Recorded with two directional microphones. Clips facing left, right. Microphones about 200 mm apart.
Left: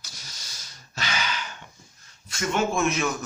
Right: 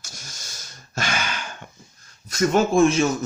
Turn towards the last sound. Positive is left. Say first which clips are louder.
# right 7 dB
turn(degrees=-30)  # may be behind; listen again after turning